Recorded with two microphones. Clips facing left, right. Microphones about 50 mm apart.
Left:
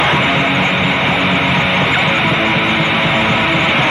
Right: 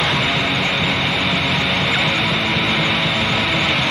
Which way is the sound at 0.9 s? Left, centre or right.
Left.